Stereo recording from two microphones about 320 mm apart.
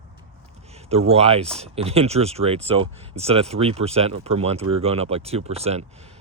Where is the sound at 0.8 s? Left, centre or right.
Centre.